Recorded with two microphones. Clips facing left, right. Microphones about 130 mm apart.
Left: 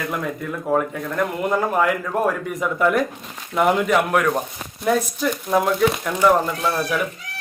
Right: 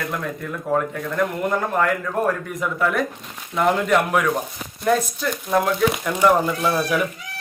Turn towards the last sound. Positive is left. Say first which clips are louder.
# right 1 dB
turn(degrees=-5)  # may be behind; listen again after turning